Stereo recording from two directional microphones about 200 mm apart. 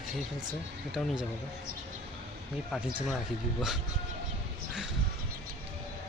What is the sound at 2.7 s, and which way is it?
Speech, centre (ahead or behind).